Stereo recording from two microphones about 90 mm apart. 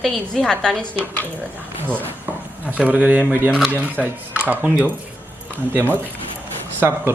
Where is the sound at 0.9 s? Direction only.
20° left (ahead or behind).